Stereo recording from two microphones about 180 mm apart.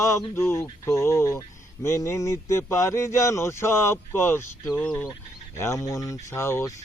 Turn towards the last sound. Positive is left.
turn(degrees=15)  # may be behind; listen again after turning